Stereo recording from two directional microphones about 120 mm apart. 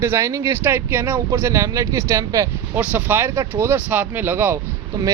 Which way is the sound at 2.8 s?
15° right (ahead or behind).